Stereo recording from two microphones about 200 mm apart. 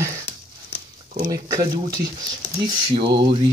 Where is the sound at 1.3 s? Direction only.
15° right (ahead or behind).